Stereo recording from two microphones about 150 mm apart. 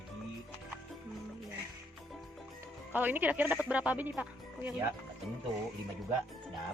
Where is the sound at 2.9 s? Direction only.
10° right (ahead or behind).